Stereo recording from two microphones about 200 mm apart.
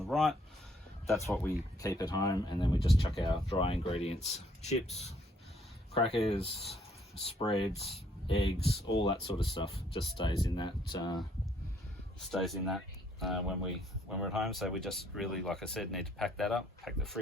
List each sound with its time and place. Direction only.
0.0 s speech: centre (ahead or behind); by 11.2 s 20° left (ahead or behind)
12.3 s speech: centre (ahead or behind)